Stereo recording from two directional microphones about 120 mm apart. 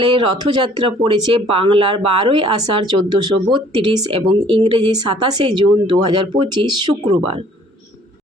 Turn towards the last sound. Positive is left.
turn(degrees=-45)  # may be behind; listen again after turning